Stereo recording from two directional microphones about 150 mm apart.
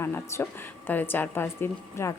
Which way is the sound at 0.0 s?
15° left (ahead or behind).